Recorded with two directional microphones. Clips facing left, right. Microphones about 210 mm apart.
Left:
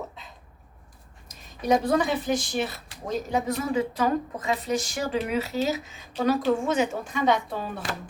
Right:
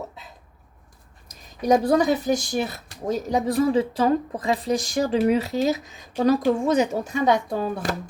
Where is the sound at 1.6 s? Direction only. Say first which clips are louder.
Right 4 dB; 40° right (ahead or behind).